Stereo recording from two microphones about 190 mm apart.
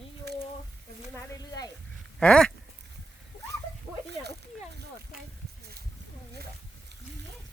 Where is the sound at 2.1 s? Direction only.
5° left (ahead or behind).